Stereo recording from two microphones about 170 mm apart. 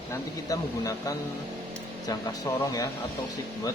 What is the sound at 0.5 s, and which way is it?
Speech, 20° left (ahead or behind).